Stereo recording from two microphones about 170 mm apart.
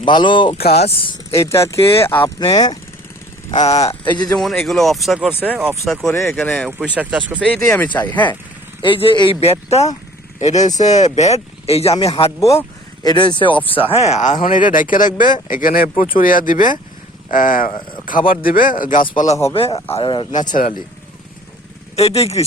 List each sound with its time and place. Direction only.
0.0 s speech: 25° left (ahead or behind)
1.3 s speech: 15° left (ahead or behind)
4.3 s speech: centre (ahead or behind)
6.9 s speech: 10° right (ahead or behind)
7.3 s speech: 5° left (ahead or behind)
8.8 s speech: 30° left (ahead or behind)
12.4 s speech: 20° left (ahead or behind)
13.1 s speech: 30° left (ahead or behind); by 17.7 s 50° left (ahead or behind)
17.7 s speech: 30° left (ahead or behind)
18.0 s speech: 55° left (ahead or behind)
19.5 s speech: 35° left (ahead or behind)
20.3 s speech: 50° left (ahead or behind)
21.9 s speech: 35° left (ahead or behind)